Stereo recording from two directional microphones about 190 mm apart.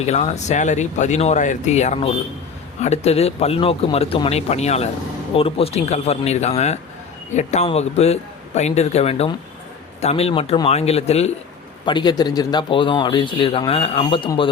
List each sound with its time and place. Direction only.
0.0 s speech: 35° left (ahead or behind)
11.9 s speech: 25° left (ahead or behind)